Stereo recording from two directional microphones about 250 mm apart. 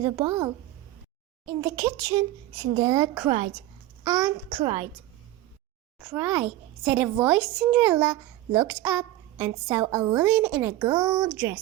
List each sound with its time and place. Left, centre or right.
0.0 s a child's voice: centre
6.0 s a child's voice: centre